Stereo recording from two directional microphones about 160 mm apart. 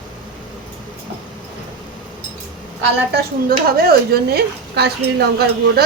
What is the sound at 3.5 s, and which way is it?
Speech, 70° right (ahead or behind).